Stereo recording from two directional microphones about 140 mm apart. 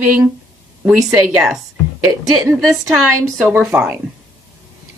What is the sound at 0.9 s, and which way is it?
Speech, centre (ahead or behind).